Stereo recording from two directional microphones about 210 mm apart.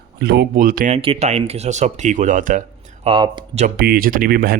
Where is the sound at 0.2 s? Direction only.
50° right (ahead or behind).